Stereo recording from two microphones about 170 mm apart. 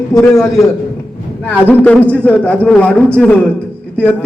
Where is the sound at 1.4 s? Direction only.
10° left (ahead or behind).